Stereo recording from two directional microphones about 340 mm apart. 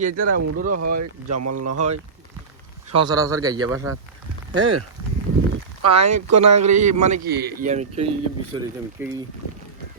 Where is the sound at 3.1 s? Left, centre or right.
Centre.